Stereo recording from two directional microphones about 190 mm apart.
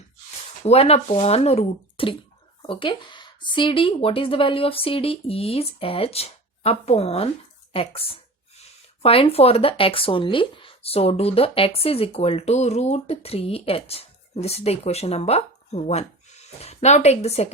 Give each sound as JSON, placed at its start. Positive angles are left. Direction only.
{"t": 0.6, "sound": "speech", "side_deg": 35}